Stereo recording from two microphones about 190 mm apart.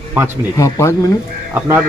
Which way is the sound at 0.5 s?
15° left (ahead or behind).